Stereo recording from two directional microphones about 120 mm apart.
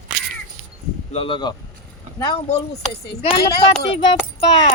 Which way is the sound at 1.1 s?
50° left (ahead or behind).